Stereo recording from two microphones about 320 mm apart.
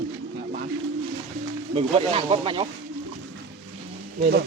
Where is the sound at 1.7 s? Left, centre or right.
Centre.